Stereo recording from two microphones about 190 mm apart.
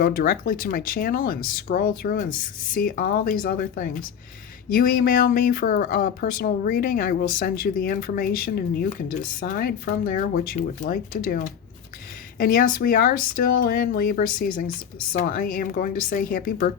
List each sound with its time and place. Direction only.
0.0 s speech: 50° left (ahead or behind)